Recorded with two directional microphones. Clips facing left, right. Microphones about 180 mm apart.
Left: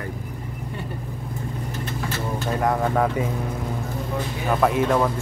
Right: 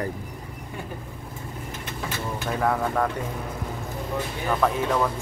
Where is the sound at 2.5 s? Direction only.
5° left (ahead or behind).